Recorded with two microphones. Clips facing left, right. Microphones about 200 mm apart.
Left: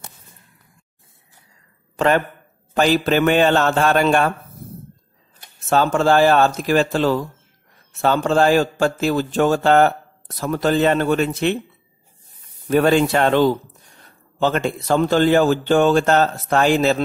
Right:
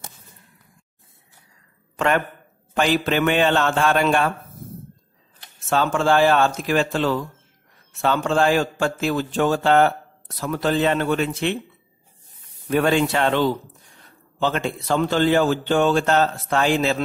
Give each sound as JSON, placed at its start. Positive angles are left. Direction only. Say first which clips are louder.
{"t": 2.0, "sound": "speech", "louder": "left 4 dB", "side_deg": 35}
{"t": 5.7, "sound": "a man's voice", "louder": "left 3 dB", "side_deg": 40}
{"t": 12.6, "sound": "a man's voice", "louder": "left 4 dB", "side_deg": 40}